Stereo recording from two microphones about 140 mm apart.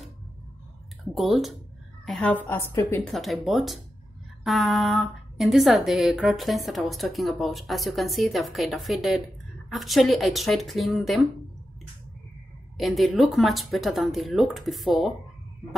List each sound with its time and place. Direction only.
1.1 s a woman's voice: centre (ahead or behind)
2.4 s a woman's voice: 15° left (ahead or behind)
3.1 s a woman's voice: centre (ahead or behind)
12.7 s a woman's voice: centre (ahead or behind)